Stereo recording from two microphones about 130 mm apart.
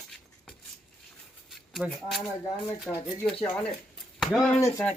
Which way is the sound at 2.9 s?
5° left (ahead or behind).